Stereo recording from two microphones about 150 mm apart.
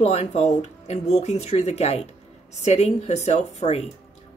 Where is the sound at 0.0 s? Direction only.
50° left (ahead or behind).